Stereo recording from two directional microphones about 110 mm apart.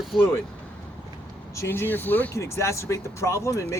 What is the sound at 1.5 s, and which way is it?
Speech, 20° left (ahead or behind).